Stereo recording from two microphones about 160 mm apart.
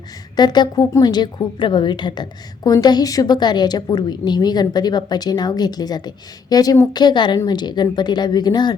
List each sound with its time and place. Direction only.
0.3 s a woman's voice: 25° left (ahead or behind)